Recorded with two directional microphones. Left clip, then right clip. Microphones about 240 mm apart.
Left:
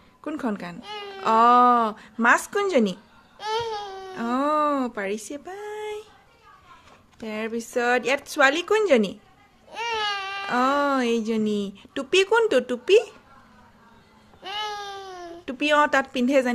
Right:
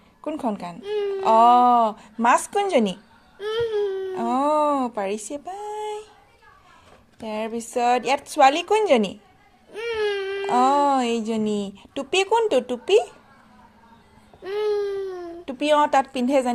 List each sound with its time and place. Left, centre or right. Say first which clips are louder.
0.3 s speech: right 3 dB; centre
3.5 s baby cry: right 5 dB; left
4.1 s a sound: right 1 dB; centre
7.2 s speech: right 2 dB; centre
9.7 s baby cry: right 1 dB; left
10.5 s speech: right 4 dB; centre
15.1 s a child's voice: right 2 dB; left